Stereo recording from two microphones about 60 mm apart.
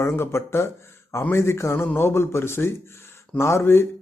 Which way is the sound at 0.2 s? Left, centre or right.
Left.